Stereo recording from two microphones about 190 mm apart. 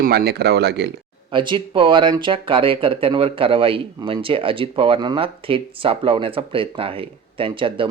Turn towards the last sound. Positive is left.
turn(degrees=-25)  # may be behind; listen again after turning